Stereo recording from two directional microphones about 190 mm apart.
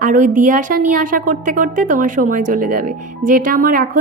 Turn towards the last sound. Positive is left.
turn(degrees=-45)  # may be behind; listen again after turning